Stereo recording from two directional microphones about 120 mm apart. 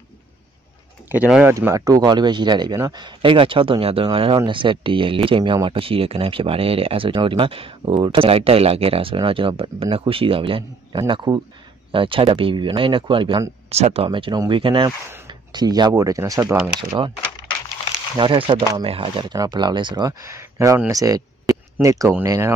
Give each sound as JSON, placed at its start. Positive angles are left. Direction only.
{"t": 1.4, "sound": "speech", "side_deg": -20}
{"t": 13.7, "sound": "speech", "side_deg": -60}
{"t": 18.1, "sound": "speech", "side_deg": -40}
{"t": 18.9, "sound": "speech", "side_deg": -50}
{"t": 19.3, "sound": "speech", "side_deg": -35}